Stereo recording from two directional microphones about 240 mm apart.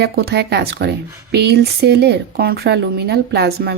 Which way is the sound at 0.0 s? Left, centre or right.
Right.